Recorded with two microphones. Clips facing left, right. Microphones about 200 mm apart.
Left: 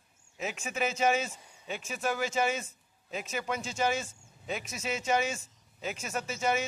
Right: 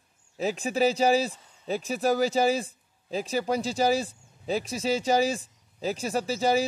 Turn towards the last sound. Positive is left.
turn(degrees=-35)  # may be behind; listen again after turning